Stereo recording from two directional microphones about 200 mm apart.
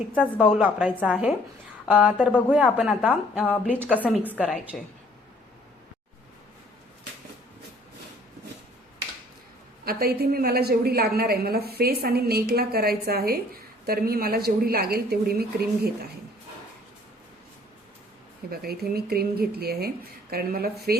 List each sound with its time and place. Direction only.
0.2 s a woman's voice: 5° left (ahead or behind)
0.9 s a woman's voice: 5° left (ahead or behind)
1.9 s a woman's voice: 5° right (ahead or behind)
3.4 s a woman's voice: 5° left (ahead or behind)
9.8 s a woman's voice: 50° right (ahead or behind)
18.5 s a woman's voice: 50° right (ahead or behind)